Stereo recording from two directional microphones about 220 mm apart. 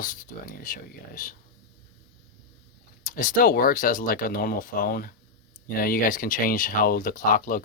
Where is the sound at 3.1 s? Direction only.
40° left (ahead or behind).